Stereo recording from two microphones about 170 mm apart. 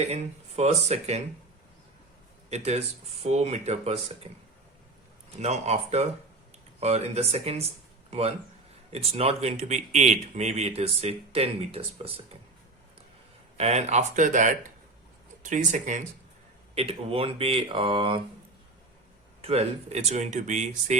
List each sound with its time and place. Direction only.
0.0 s speech: 40° right (ahead or behind)
2.5 s speech: 40° right (ahead or behind)
5.4 s speech: 40° right (ahead or behind)
8.9 s speech: 35° right (ahead or behind)
13.6 s speech: 40° right (ahead or behind)
16.7 s speech: 35° right (ahead or behind)
19.4 s speech: 35° right (ahead or behind)